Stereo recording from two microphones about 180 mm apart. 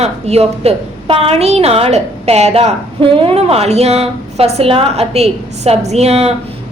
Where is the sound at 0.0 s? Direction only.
35° right (ahead or behind).